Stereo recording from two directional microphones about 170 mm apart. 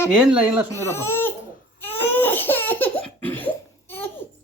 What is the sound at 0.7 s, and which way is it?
Speech, 15° left (ahead or behind).